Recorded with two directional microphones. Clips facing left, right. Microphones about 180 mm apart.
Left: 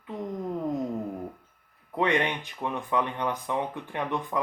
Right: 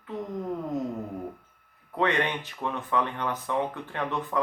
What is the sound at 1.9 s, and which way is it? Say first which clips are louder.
Speech: even; 15° left (ahead or behind).